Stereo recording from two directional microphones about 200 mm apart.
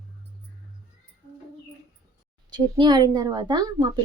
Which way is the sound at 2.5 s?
20° right (ahead or behind).